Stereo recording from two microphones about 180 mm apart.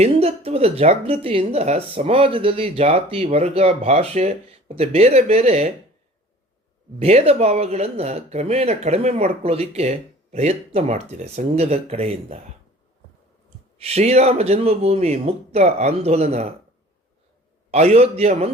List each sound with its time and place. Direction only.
0.0 s speech: 35° right (ahead or behind)
7.0 s speech: 35° right (ahead or behind)
13.7 s speech: 35° right (ahead or behind)
17.7 s speech: 35° right (ahead or behind)